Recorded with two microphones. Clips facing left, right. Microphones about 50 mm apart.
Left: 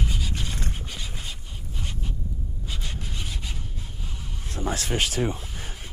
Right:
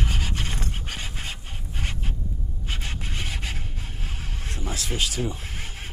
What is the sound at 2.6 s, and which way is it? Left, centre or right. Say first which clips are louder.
Filing: right 4 dB; right.